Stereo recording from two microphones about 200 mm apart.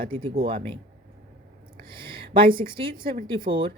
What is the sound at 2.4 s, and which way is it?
A woman's voice, 25° right (ahead or behind).